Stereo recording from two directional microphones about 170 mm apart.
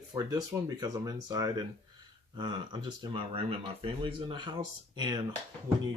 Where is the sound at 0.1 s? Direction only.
20° right (ahead or behind).